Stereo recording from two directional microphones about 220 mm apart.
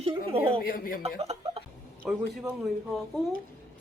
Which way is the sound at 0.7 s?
40° left (ahead or behind).